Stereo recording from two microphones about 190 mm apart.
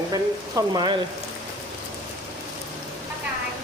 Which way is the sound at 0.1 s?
20° right (ahead or behind).